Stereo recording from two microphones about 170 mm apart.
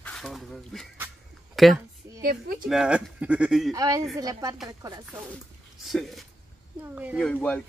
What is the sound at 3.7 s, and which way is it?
Speech, 20° right (ahead or behind).